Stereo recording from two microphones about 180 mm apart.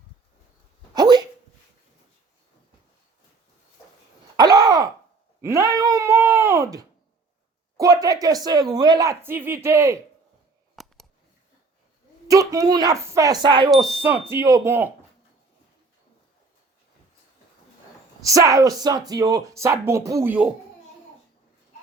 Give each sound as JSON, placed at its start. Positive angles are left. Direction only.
{"t": 0.9, "sound": "dog", "side_deg": -25}
{"t": 4.4, "sound": "a sound", "side_deg": -20}
{"t": 7.8, "sound": "speech", "side_deg": -20}
{"t": 10.8, "sound": "scissors", "side_deg": 0}
{"t": 12.3, "sound": "speech", "side_deg": -20}
{"t": 14.0, "sound": "speech", "side_deg": -10}
{"t": 18.3, "sound": "speech", "side_deg": -20}